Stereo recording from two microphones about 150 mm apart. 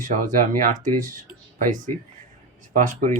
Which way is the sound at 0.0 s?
60° right (ahead or behind).